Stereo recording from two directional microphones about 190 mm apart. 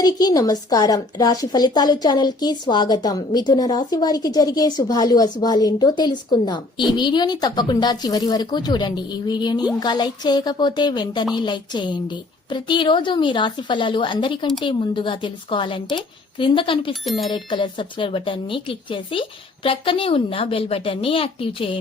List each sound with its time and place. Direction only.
0.0 s a woman's voice: 20° left (ahead or behind)
16.9 s speech: centre (ahead or behind)
17.3 s a woman's voice: 25° left (ahead or behind)